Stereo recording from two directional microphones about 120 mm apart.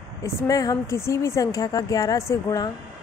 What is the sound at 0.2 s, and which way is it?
Speech, 30° left (ahead or behind).